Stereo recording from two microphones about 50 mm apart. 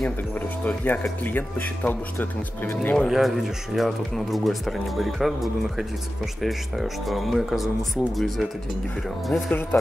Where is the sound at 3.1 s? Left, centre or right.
Centre.